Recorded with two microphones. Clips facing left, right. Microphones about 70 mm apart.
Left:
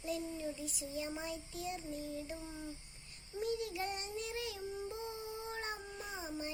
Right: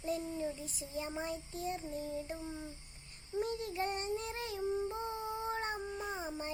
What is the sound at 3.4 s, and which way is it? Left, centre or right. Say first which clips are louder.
Child singing: even; right.